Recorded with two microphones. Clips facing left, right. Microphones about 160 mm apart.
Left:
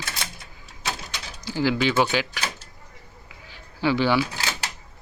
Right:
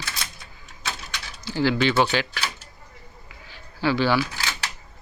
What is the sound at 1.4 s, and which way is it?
Speech, 10° left (ahead or behind).